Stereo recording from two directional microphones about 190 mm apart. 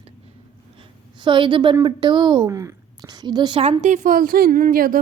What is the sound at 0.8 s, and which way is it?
A woman's voice, 25° right (ahead or behind).